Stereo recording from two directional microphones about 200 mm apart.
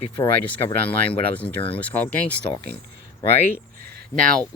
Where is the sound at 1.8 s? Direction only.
10° left (ahead or behind).